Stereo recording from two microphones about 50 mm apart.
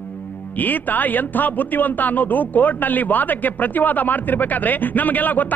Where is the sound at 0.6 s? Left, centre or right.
Left.